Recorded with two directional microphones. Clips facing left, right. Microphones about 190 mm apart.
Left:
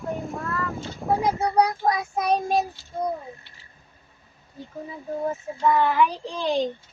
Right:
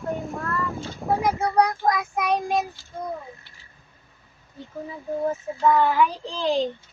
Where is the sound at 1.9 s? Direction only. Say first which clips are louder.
Even; 35° left (ahead or behind).